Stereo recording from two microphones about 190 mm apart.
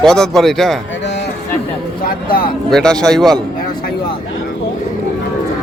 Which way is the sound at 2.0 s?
50° left (ahead or behind).